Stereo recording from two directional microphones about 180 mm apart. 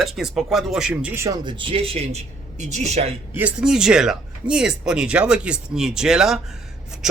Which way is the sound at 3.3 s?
5° right (ahead or behind).